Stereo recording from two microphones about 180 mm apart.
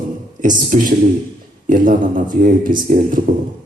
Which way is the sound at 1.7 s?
45° right (ahead or behind).